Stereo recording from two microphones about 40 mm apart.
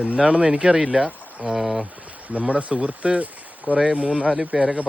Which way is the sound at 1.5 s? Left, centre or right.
Centre.